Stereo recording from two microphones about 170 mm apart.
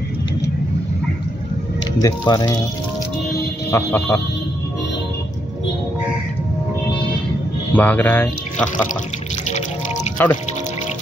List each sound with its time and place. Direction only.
2.0 s speech: 20° left (ahead or behind)
3.7 s speech: 15° left (ahead or behind)
7.7 s speech: 10° left (ahead or behind)
10.2 s speech: 10° left (ahead or behind)